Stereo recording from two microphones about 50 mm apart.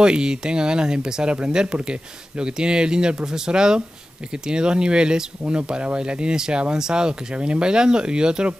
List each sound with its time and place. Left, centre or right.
0.0 s speech: centre